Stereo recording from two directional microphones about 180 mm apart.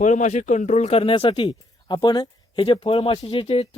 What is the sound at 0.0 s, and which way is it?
Speech, 45° left (ahead or behind).